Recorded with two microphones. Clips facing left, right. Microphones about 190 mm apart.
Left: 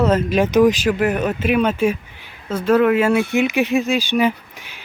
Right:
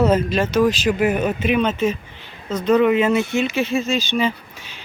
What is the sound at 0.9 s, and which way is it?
Speech, centre (ahead or behind).